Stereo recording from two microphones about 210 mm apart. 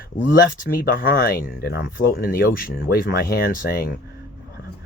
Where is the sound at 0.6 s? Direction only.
45° left (ahead or behind).